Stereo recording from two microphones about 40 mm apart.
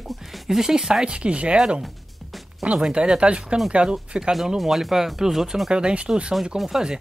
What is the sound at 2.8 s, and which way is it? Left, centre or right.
Speech, right.